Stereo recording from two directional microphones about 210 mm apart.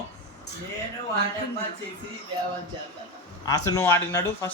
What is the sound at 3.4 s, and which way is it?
Speech, 15° left (ahead or behind).